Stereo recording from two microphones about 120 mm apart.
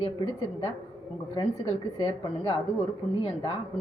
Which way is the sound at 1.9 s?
45° left (ahead or behind).